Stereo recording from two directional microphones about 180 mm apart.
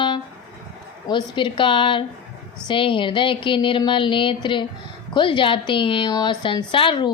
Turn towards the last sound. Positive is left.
turn(degrees=25)  # may be behind; listen again after turning